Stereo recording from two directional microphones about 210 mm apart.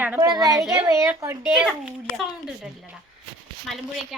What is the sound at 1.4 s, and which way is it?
A woman's voice, 5° right (ahead or behind).